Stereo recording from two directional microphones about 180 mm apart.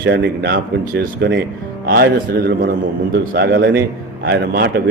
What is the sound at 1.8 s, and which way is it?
A man's voice, 55° right (ahead or behind).